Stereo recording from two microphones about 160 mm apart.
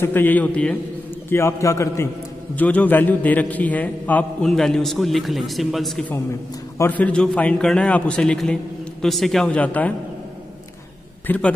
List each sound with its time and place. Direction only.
0.0 s a man's voice: 10° left (ahead or behind)
1.3 s a man's voice: 20° left (ahead or behind)
11.2 s a man's voice: 10° left (ahead or behind)